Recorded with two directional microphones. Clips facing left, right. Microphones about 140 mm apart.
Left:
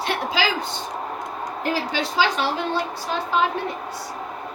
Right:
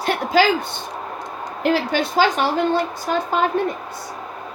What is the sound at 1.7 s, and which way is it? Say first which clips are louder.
Speech: right 6 dB; 55° right (ahead or behind).